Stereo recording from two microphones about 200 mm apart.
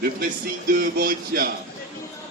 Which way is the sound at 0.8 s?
45° right (ahead or behind).